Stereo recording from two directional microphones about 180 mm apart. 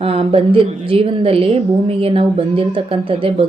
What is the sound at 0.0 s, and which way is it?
A woman's voice, 30° right (ahead or behind).